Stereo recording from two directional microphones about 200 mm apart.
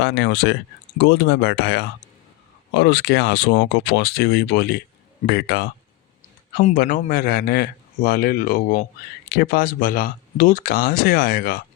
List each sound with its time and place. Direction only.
0.0 s speech: 60° left (ahead or behind)
6.5 s speech: 40° left (ahead or behind)